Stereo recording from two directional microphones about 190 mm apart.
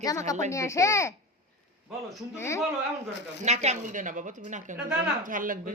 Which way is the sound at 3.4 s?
35° right (ahead or behind).